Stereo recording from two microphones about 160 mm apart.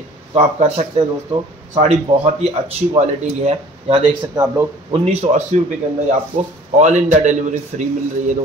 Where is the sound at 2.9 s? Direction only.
40° right (ahead or behind).